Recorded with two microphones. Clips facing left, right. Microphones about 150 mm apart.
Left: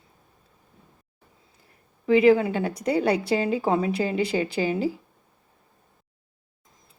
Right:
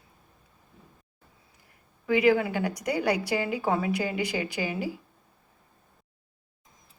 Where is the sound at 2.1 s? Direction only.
25° left (ahead or behind).